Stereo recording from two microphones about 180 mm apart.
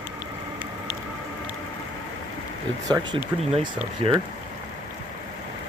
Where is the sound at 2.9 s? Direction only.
25° right (ahead or behind).